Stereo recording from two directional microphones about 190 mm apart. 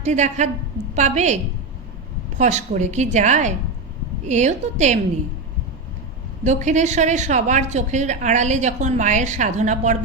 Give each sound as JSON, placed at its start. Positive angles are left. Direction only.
{"t": 0.0, "sound": "a woman's voice", "side_deg": -40}
{"t": 2.4, "sound": "a woman's voice", "side_deg": -40}
{"t": 6.4, "sound": "a woman's voice", "side_deg": -40}